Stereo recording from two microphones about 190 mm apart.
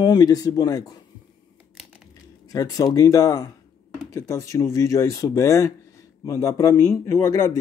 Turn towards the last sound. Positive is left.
turn(degrees=15)  # may be behind; listen again after turning